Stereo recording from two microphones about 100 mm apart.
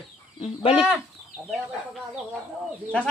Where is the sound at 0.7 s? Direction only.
10° right (ahead or behind).